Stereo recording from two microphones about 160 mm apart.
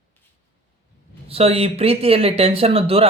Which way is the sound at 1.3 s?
40° right (ahead or behind).